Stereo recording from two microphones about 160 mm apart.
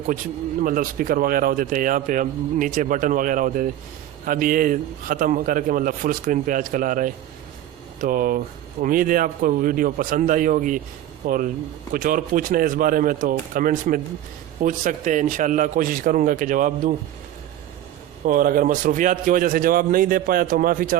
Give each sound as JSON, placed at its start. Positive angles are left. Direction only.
{"t": 0.6, "sound": "a man's voice", "side_deg": -60}
{"t": 18.3, "sound": "a man's voice", "side_deg": -60}